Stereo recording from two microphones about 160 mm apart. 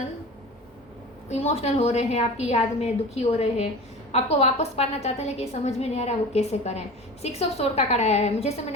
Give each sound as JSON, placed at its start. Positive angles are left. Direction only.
{"t": 1.3, "sound": "a woman's voice", "side_deg": 40}